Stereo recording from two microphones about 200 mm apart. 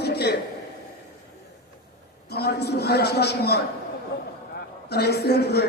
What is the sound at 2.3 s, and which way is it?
A man's voice, 55° left (ahead or behind).